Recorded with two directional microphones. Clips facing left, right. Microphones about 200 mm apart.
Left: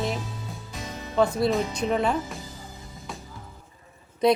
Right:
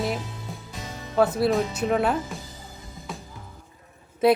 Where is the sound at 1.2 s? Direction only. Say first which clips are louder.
Right 1 dB; centre (ahead or behind).